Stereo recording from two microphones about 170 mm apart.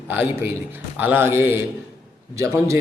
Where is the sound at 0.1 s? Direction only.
10° right (ahead or behind).